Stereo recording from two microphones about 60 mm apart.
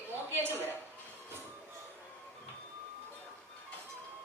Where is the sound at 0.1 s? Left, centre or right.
Right.